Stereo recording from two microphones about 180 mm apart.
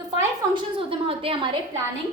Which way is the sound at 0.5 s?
30° right (ahead or behind).